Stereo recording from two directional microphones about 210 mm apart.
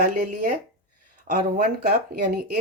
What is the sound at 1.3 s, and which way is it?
Speech, 45° right (ahead or behind).